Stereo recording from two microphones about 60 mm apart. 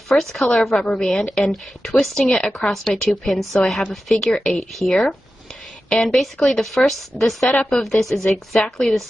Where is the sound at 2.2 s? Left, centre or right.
Centre.